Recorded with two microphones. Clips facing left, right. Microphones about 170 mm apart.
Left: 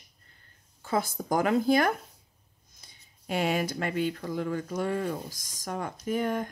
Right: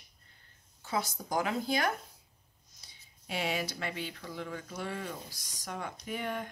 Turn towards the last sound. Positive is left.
turn(degrees=45)  # may be behind; listen again after turning